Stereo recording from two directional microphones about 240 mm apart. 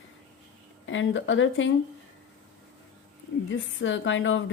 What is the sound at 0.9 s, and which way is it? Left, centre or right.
Speech, left.